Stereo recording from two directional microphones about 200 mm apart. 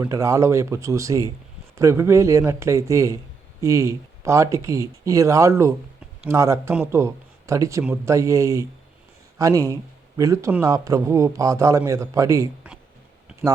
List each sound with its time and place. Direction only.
0.0 s a man's voice: 15° right (ahead or behind)